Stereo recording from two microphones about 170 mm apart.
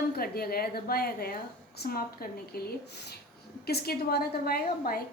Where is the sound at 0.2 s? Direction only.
65° left (ahead or behind).